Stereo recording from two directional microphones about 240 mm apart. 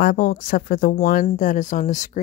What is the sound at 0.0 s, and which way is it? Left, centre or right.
Speech, left.